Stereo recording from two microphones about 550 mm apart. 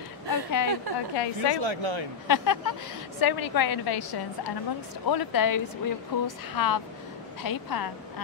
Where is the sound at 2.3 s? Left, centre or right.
Left.